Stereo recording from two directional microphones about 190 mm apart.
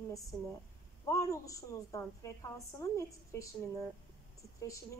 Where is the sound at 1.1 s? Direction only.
15° left (ahead or behind).